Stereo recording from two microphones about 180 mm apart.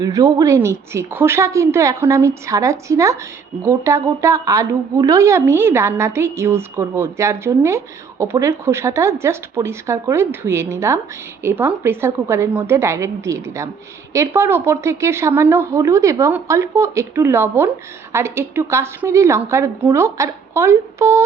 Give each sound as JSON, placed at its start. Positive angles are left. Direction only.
{"t": 0.0, "sound": "a woman's voice", "side_deg": -20}